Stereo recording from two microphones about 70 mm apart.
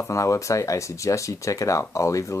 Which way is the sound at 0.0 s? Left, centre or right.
Left.